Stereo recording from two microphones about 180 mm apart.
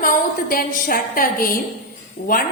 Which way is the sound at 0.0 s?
55° left (ahead or behind).